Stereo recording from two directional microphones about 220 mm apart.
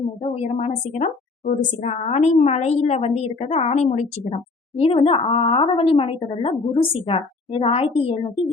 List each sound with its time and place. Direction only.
0.2 s a woman's voice: 30° left (ahead or behind)